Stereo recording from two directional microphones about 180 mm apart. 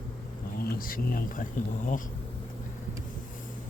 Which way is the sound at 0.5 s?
55° left (ahead or behind).